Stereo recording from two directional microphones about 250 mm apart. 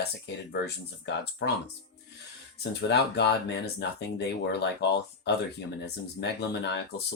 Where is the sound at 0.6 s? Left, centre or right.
Left.